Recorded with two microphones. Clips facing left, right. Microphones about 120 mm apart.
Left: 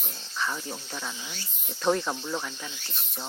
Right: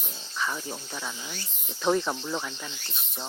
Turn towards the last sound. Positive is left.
turn(degrees=0)  # may be behind; listen again after turning